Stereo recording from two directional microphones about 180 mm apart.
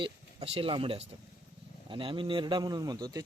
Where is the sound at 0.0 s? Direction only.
35° right (ahead or behind).